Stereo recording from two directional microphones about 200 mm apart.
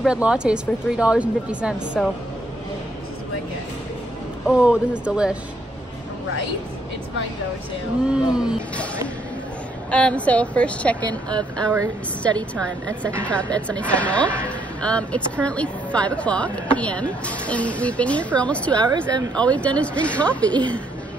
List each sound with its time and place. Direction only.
0.0 s speech: 5° right (ahead or behind)
4.5 s speech: 5° right (ahead or behind)
8.1 s speech: 5° right (ahead or behind)
9.8 s speech: 5° left (ahead or behind)
11.1 s speech: 20° right (ahead or behind)
12.4 s speech: 5° left (ahead or behind)
18.8 s speech: 20° right (ahead or behind)
19.3 s speech: 5° left (ahead or behind)